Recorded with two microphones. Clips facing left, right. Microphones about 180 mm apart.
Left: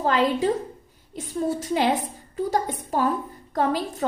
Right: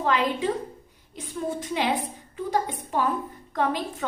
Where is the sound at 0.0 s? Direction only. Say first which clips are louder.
Left 3 dB; 40° left (ahead or behind).